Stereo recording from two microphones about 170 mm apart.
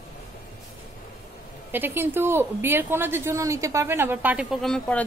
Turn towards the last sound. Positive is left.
turn(degrees=5)  # may be behind; listen again after turning